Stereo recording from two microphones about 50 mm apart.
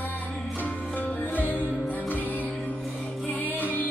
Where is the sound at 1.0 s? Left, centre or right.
Left.